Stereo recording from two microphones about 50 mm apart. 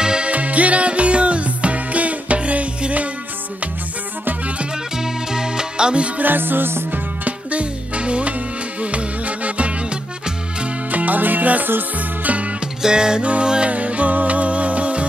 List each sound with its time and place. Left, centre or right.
0.0 s music: centre
0.3 s music: right
4.9 s music: centre
6.1 s music: right
7.2 s music: right
10.9 s music: right
12.8 s music: centre